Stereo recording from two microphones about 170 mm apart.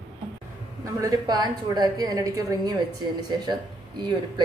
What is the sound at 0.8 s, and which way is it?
A woman's voice, 20° right (ahead or behind).